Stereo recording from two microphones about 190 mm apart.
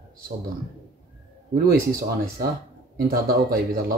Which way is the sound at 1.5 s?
50° right (ahead or behind).